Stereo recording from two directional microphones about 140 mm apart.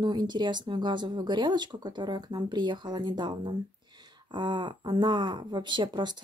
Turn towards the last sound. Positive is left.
turn(degrees=-30)  # may be behind; listen again after turning